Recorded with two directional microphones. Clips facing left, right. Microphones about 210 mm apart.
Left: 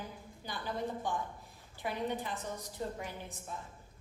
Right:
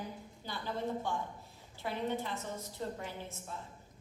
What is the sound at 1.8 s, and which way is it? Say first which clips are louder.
A woman's voice: even; 15° left (ahead or behind).